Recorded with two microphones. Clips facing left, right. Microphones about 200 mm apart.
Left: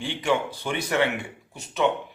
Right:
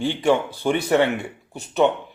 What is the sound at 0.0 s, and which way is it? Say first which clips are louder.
A man's voice: right 5 dB; 40° right (ahead or behind).